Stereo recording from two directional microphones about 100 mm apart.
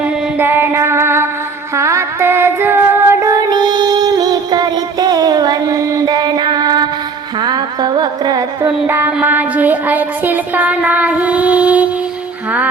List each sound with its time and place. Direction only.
0.0 s female singing: 20° right (ahead or behind)
1.7 s music: 30° right (ahead or behind)
3.5 s music: 45° right (ahead or behind)
8.6 s a sound: 20° right (ahead or behind)